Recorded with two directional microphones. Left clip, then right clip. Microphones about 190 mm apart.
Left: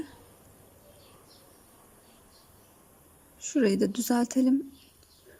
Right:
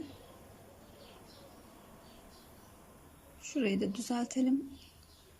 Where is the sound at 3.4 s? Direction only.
25° left (ahead or behind).